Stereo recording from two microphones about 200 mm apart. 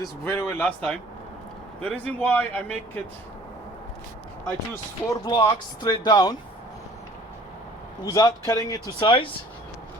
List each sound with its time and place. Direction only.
0.0 s speech: 10° left (ahead or behind)
4.7 s speech: 20° left (ahead or behind)
8.1 s speech: 15° left (ahead or behind)